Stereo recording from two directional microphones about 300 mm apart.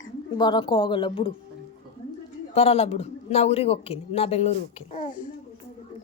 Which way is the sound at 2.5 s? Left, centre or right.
Centre.